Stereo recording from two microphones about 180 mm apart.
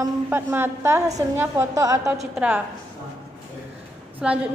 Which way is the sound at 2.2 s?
5° right (ahead or behind).